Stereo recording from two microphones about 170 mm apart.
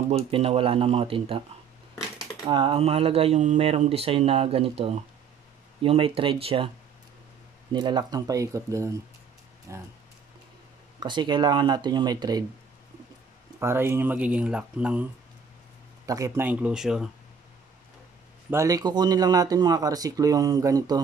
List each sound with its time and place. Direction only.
0.3 s speech: 35° right (ahead or behind)
2.4 s speech: 30° right (ahead or behind)
7.7 s speech: 25° right (ahead or behind)
11.0 s speech: 25° right (ahead or behind)
13.6 s speech: 15° right (ahead or behind)
16.1 s speech: 20° right (ahead or behind); by 17.1 s 5° right (ahead or behind)
18.5 s speech: 20° right (ahead or behind)